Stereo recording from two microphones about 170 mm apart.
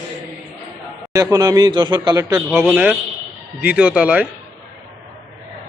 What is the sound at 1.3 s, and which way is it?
A man's voice, 20° right (ahead or behind).